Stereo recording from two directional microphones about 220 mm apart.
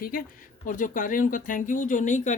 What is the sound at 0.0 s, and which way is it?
Speech, 40° left (ahead or behind).